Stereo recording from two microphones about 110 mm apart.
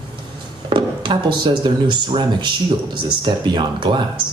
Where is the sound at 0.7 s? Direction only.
45° right (ahead or behind).